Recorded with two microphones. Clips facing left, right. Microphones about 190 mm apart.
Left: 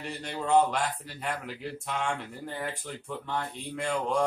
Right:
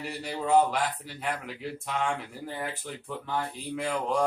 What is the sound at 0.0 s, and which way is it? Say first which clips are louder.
A man's voice: right 2 dB; 5° right (ahead or behind).